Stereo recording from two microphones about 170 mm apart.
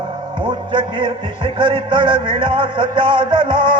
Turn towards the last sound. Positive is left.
turn(degrees=-30)  # may be behind; listen again after turning